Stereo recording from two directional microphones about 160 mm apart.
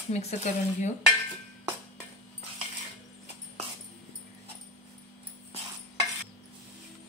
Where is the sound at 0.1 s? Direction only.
45° left (ahead or behind).